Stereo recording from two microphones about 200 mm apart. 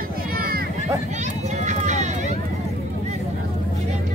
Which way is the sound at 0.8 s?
35° right (ahead or behind).